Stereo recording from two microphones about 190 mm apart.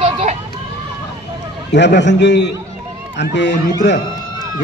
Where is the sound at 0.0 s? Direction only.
35° right (ahead or behind).